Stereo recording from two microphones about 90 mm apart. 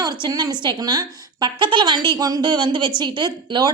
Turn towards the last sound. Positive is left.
turn(degrees=-55)  # may be behind; listen again after turning